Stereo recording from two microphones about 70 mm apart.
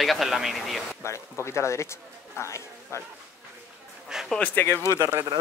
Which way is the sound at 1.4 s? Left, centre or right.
Left.